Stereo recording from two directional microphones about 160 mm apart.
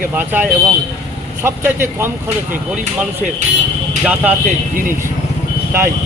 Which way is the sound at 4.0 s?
10° right (ahead or behind).